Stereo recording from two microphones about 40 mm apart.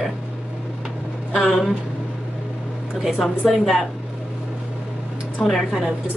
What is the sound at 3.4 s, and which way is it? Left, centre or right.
Speech, centre.